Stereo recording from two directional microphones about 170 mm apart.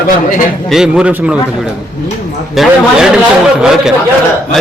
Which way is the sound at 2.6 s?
Centre (ahead or behind).